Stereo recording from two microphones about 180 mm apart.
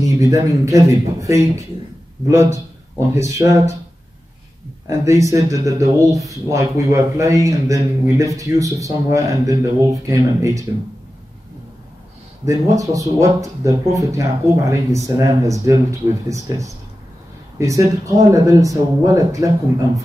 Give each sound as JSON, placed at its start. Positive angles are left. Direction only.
{"t": 0.0, "sound": "speech", "side_deg": -20}
{"t": 4.8, "sound": "speech", "side_deg": -15}
{"t": 12.4, "sound": "speech", "side_deg": -20}